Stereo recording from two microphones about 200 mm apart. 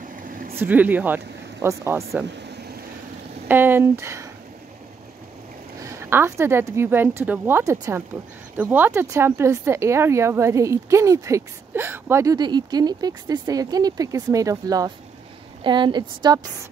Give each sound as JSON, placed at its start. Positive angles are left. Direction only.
{"t": 0.1, "sound": "a sound", "side_deg": -45}
{"t": 0.6, "sound": "speech", "side_deg": -10}
{"t": 2.4, "sound": "vehicle", "side_deg": -55}
{"t": 3.4, "sound": "speech", "side_deg": -10}
{"t": 5.8, "sound": "a woman's voice", "side_deg": -15}